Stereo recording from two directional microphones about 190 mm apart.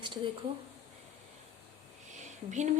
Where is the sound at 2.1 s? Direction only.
40° right (ahead or behind).